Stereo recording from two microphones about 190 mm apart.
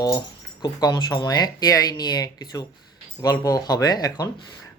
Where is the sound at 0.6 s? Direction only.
20° left (ahead or behind).